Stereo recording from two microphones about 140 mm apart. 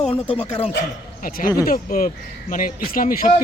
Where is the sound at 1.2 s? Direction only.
80° left.